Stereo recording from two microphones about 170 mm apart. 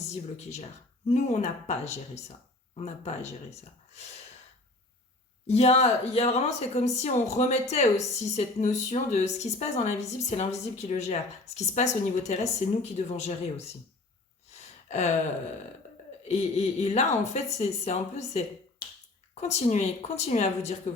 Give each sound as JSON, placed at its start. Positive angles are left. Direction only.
{"t": 0.1, "sound": "speech", "side_deg": 40}
{"t": 5.5, "sound": "speech", "side_deg": 40}
{"t": 14.5, "sound": "gasp", "side_deg": 40}
{"t": 16.2, "sound": "speech", "side_deg": 40}